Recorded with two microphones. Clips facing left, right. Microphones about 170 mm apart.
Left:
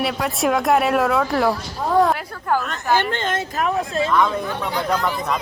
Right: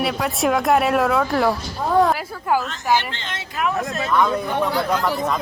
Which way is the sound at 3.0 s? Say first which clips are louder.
Left 7 dB; 50° left (ahead or behind).